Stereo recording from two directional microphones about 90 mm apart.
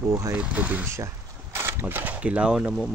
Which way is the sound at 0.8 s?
30° right (ahead or behind).